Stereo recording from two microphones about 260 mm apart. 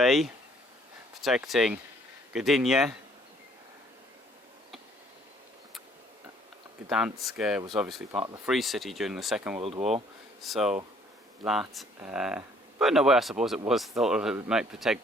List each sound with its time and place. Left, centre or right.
0.0 s speech: centre
6.9 s speech: centre
9.6 s speech: right
10.4 s speech: centre
11.9 s speech: centre